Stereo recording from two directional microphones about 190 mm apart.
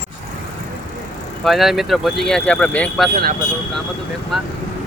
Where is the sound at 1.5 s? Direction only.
Centre (ahead or behind).